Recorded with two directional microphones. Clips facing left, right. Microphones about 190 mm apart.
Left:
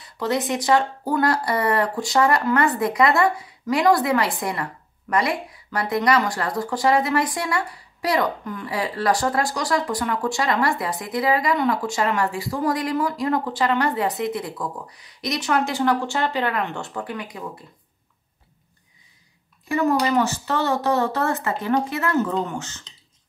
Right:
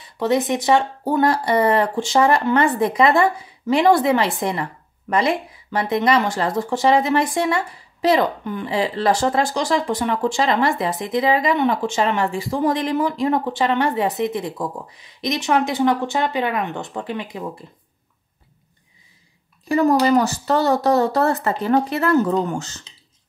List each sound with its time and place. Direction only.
0.2 s speech: 20° right (ahead or behind)
19.7 s speech: 35° right (ahead or behind)
22.9 s beatboxing: 5° right (ahead or behind)